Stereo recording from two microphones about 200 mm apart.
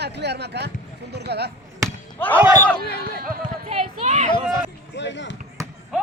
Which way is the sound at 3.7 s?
35° right (ahead or behind).